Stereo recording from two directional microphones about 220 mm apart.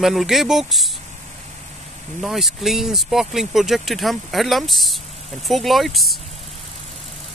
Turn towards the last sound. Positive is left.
turn(degrees=0)  # may be behind; listen again after turning